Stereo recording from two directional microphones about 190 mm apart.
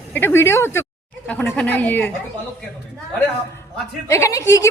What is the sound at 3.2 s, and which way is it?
A woman's voice, 10° left (ahead or behind).